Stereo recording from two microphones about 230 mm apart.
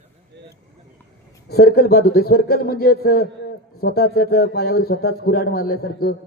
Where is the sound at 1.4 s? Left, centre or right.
Left.